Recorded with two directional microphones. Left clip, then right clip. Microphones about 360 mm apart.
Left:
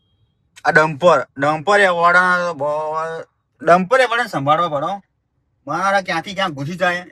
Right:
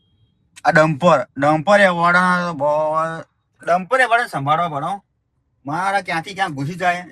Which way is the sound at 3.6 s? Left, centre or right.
Left.